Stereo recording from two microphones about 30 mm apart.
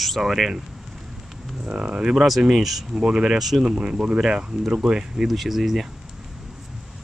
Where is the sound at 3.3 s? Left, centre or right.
Centre.